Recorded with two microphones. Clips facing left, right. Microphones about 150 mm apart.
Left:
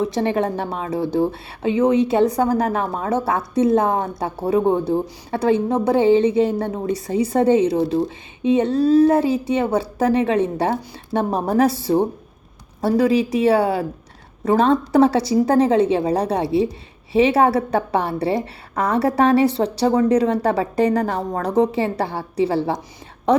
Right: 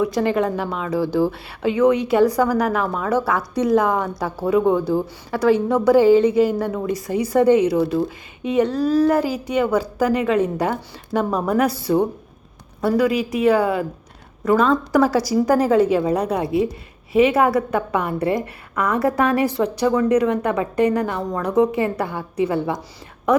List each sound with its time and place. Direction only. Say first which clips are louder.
0.0 s a woman's voice: right 1 dB; 25° left (ahead or behind)